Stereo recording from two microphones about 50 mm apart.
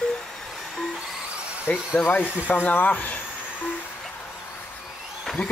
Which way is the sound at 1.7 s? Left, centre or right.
Left.